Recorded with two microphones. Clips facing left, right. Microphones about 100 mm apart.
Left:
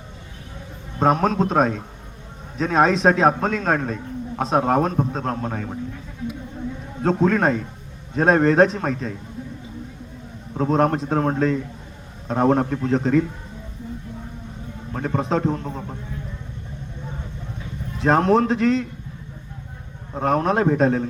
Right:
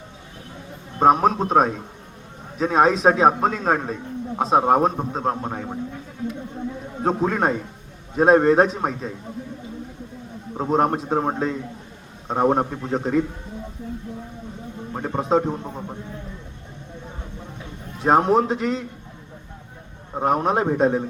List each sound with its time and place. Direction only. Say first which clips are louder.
0.9 s a man's voice: right 2 dB; 5° right (ahead or behind)
7.0 s a man's voice: left 2 dB; 15° right (ahead or behind)
10.6 s a man's voice: left 1 dB; 10° right (ahead or behind)
14.9 s a man's voice: right 2 dB; 15° right (ahead or behind)
18.0 s a man's voice: even; 15° right (ahead or behind)
20.2 s a man's voice: left 1 dB; 15° right (ahead or behind)